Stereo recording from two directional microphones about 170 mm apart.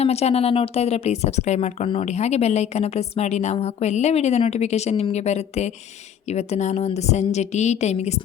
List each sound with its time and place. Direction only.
0.0 s a woman's voice: 40° left (ahead or behind)